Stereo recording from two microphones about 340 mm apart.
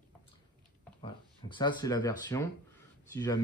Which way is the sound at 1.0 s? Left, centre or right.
Centre.